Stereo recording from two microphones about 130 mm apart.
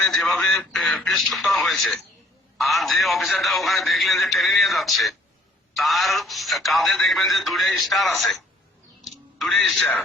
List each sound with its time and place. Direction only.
0.0 s speech: centre (ahead or behind)